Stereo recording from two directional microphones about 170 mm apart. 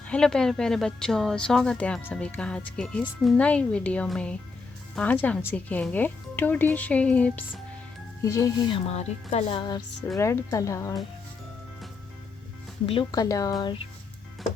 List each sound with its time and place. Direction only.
0.1 s speech: 5° left (ahead or behind)
8.2 s speech: 20° left (ahead or behind)
8.7 s speech: 40° left (ahead or behind); by 10.9 s 20° left (ahead or behind)
12.8 s speech: 30° left (ahead or behind)